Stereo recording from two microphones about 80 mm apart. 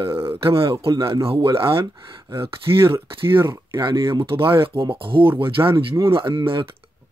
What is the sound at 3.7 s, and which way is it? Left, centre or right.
Speech, right.